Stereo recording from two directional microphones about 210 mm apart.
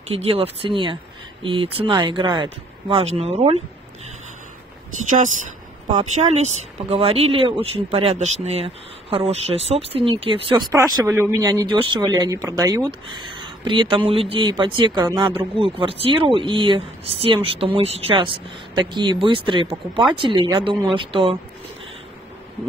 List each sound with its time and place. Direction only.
0.1 s speech: 25° right (ahead or behind)
5.9 s speech: 35° right (ahead or behind)